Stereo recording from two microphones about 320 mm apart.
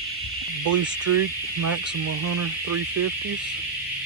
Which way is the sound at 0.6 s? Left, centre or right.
Right.